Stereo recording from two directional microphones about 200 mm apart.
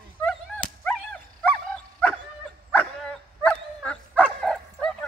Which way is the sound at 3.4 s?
5° left (ahead or behind).